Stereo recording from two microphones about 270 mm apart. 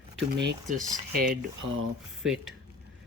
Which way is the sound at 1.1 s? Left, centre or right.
Right.